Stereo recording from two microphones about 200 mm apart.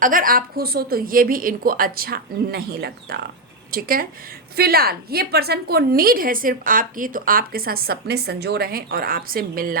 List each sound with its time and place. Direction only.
0.0 s a woman's voice: 45° right (ahead or behind)